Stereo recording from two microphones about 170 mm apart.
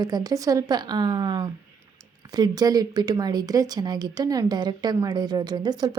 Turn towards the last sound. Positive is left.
turn(degrees=-25)  # may be behind; listen again after turning